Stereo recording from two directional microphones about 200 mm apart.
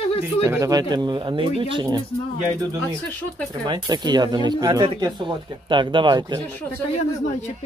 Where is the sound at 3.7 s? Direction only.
20° right (ahead or behind).